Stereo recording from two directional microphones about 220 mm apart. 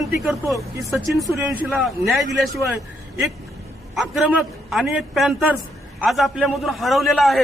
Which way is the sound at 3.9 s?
Centre (ahead or behind).